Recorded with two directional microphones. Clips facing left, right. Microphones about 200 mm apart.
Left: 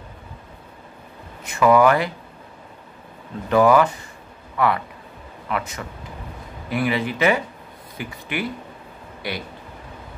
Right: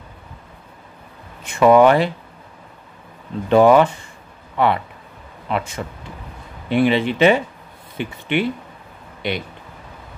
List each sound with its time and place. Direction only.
1.4 s speech: 25° right (ahead or behind)
3.4 s speech: 25° right (ahead or behind)